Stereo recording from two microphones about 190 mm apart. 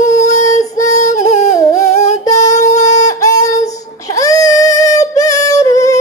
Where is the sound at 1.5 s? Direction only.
15° left (ahead or behind).